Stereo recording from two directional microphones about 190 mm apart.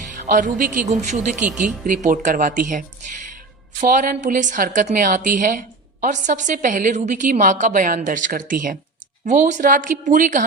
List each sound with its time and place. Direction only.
0.1 s a woman's voice: 45° right (ahead or behind)